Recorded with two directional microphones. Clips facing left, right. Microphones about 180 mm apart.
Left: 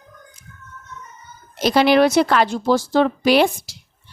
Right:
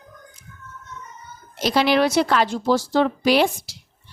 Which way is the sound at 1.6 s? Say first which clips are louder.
Left 4 dB; 50° left (ahead or behind).